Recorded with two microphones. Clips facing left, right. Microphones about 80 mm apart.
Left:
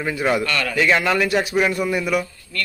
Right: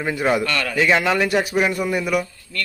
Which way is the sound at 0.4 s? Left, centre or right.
Right.